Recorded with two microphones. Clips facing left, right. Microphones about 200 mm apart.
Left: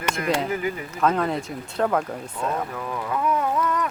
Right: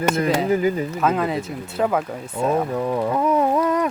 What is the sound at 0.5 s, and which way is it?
Speech, 35° right (ahead or behind).